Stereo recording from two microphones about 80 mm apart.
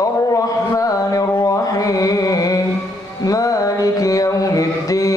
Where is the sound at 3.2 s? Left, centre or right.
Left.